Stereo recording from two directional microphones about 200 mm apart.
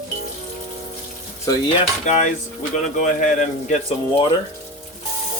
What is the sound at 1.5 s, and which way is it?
Dishes, 15° left (ahead or behind).